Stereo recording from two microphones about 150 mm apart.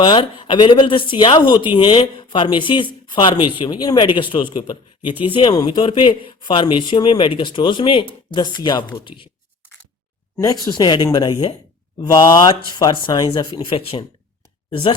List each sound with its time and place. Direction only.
0.0 s speech: 30° left (ahead or behind)
10.3 s speech: 25° left (ahead or behind)